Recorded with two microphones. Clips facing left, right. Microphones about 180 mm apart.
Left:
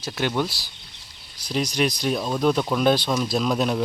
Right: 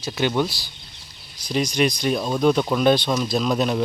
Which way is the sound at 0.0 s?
Centre (ahead or behind).